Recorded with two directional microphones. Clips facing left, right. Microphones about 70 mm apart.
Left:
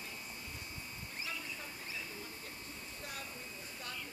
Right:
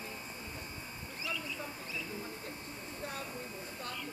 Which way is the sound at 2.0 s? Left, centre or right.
Right.